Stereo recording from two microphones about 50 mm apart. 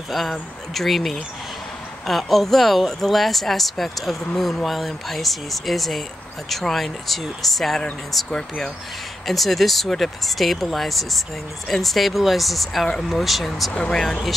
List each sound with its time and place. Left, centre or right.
0.1 s speech: centre
8.3 s speech: centre
9.2 s speech: centre
13.7 s speech: centre